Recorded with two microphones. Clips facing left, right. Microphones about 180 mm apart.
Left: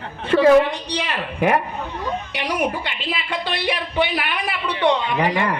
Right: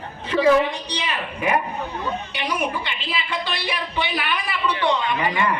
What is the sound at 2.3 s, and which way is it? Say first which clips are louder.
A woman's voice: left 4 dB; 75° left (ahead or behind).